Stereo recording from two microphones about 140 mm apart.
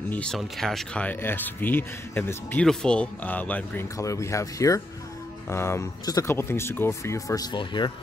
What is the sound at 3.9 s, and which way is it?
Speech, 20° left (ahead or behind).